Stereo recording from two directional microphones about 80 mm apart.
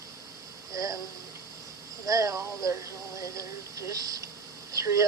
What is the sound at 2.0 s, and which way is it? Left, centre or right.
Speech, right.